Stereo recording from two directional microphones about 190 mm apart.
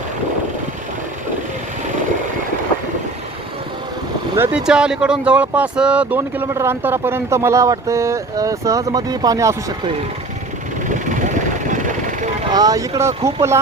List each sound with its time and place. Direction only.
4.5 s speech: 5° right (ahead or behind)
10.8 s vehicle: 40° right (ahead or behind)
12.5 s speech: 20° right (ahead or behind)